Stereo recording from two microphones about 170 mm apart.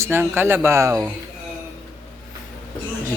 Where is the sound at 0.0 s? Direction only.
15° right (ahead or behind).